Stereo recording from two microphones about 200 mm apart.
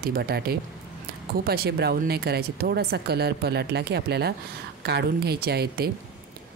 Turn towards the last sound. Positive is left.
turn(degrees=-50)  # may be behind; listen again after turning